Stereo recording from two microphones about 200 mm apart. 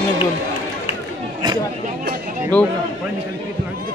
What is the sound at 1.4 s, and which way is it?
Speech, 20° right (ahead or behind).